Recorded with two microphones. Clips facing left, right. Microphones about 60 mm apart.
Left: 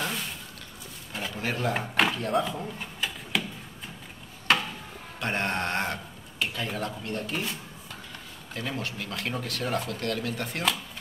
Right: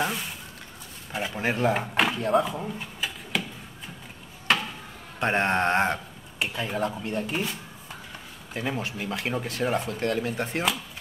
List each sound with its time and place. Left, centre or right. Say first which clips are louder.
1.1 s speech: right 4 dB; right
1.7 s speech: right 1 dB; centre
2.4 s speech: right 1 dB; centre
2.8 s a sound: even; centre
4.5 s a sound: even; centre
5.2 s speech: right 6 dB; right
8.5 s speech: right 3 dB; centre